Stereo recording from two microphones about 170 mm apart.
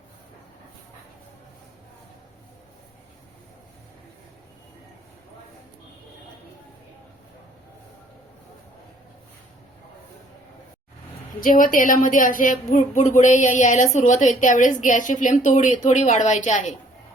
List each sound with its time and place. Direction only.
11.3 s a woman's voice: 55° left (ahead or behind)